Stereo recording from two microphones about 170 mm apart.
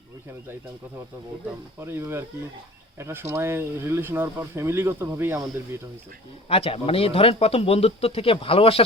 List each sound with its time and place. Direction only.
1.8 s speech: 15° right (ahead or behind)
6.5 s speech: 35° left (ahead or behind)